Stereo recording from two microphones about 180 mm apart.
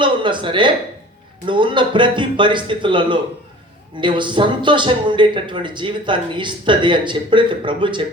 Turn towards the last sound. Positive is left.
turn(degrees=-25)  # may be behind; listen again after turning